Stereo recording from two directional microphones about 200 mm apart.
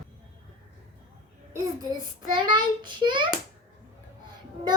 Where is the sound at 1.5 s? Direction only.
20° right (ahead or behind).